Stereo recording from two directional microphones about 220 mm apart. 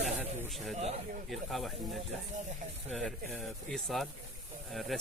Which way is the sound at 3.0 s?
Centre (ahead or behind).